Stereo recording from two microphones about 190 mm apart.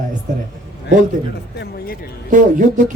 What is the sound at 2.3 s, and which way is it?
Speech, 45° right (ahead or behind).